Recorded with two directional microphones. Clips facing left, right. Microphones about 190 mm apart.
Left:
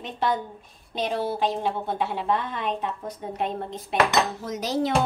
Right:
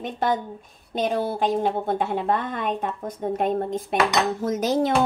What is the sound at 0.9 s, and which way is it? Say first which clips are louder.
A woman's voice: right 2 dB; 50° right (ahead or behind).